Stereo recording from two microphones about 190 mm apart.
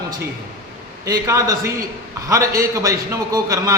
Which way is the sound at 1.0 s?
15° right (ahead or behind).